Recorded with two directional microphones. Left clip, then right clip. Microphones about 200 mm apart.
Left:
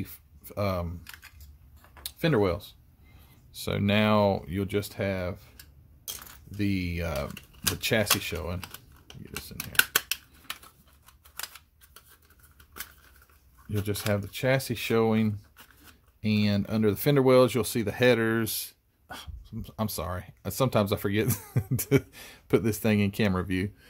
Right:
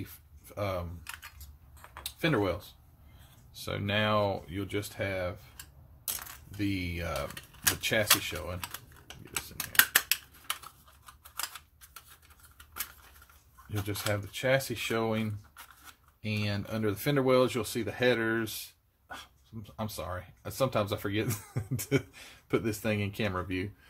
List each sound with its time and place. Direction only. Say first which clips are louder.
0.0 s a sound: left 4 dB; 60° left (ahead or behind)
2.0 s speech: left 4 dB; 55° left (ahead or behind)
6.5 s speech: left 3 dB; 60° left (ahead or behind)
9.8 s scissors: even; 15° left (ahead or behind)
13.7 s speech: left 4 dB; 55° left (ahead or behind)